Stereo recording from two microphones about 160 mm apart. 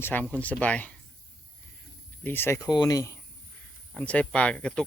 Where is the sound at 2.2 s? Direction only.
15° left (ahead or behind).